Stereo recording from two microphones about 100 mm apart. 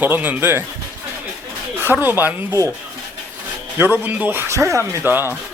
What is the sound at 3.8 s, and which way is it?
A man's voice, 15° right (ahead or behind).